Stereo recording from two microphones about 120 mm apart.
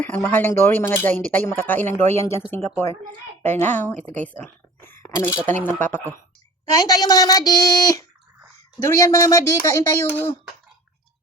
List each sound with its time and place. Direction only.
0.0 s speech: 15° left (ahead or behind)
6.7 s speech: 30° left (ahead or behind)